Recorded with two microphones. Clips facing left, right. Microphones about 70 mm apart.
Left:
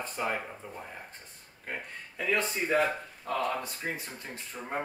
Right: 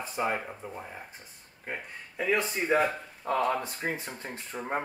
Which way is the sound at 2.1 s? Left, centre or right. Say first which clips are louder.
Right 2 dB; centre.